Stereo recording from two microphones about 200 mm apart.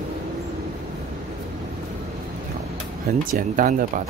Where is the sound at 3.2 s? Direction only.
45° right (ahead or behind).